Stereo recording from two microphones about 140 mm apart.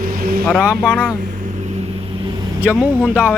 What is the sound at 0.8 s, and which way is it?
Speech, 10° left (ahead or behind).